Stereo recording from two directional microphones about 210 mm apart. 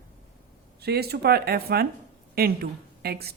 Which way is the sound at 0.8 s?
50° right (ahead or behind).